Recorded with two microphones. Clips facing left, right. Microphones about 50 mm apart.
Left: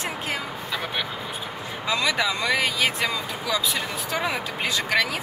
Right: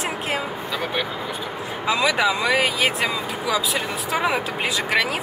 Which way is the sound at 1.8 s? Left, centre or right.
Centre.